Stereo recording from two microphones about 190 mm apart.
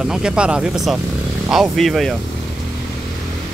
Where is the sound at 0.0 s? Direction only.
5° right (ahead or behind).